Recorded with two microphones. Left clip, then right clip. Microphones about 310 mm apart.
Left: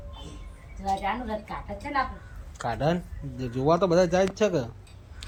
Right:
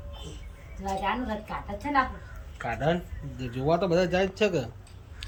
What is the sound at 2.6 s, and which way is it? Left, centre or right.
Speech, centre.